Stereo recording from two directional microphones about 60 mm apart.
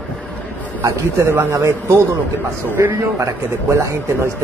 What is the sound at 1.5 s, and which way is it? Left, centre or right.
Speech, right.